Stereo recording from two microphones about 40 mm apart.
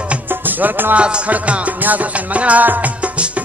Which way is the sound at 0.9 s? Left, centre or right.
Right.